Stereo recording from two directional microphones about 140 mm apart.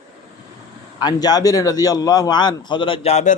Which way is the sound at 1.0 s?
30° left (ahead or behind).